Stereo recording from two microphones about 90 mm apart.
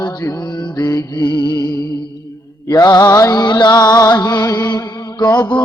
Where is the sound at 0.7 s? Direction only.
45° left (ahead or behind).